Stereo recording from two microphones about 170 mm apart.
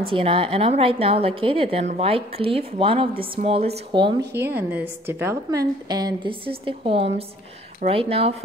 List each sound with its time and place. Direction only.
0.1 s a woman's voice: 30° right (ahead or behind)
4.2 s a woman's voice: 80° right
4.6 s a woman's voice: 10° right (ahead or behind); by 8.4 s 35° right (ahead or behind)